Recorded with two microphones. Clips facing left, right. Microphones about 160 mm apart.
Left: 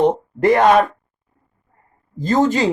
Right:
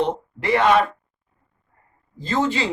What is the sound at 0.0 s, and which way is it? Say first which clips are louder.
Speech: left 8 dB; 45° left (ahead or behind).